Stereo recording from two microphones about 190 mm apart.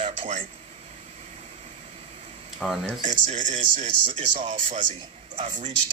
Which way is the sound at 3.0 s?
40° right (ahead or behind).